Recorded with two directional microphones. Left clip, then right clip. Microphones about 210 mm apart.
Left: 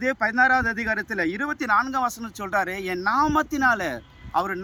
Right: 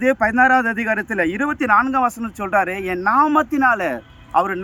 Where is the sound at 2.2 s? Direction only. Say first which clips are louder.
Right 7 dB; 25° left (ahead or behind).